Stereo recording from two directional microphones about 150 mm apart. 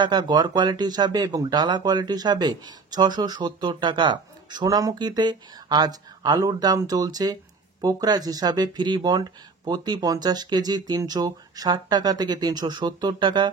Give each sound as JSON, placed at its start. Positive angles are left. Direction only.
{"t": 0.0, "sound": "speech", "side_deg": -30}